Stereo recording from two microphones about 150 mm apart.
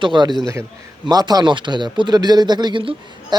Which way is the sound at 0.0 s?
30° right (ahead or behind).